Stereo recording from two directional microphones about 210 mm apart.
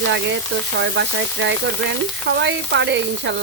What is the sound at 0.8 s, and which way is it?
Frying, 60° right (ahead or behind).